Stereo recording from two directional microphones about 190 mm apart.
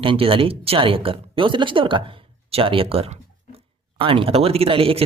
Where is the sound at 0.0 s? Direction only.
30° right (ahead or behind).